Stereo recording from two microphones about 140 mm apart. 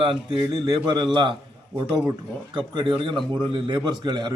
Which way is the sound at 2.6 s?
35° right (ahead or behind).